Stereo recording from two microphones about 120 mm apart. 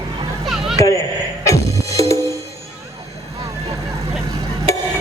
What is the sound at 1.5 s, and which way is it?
Music, 25° left (ahead or behind).